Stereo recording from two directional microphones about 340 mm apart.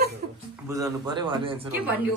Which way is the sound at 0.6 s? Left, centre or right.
Centre.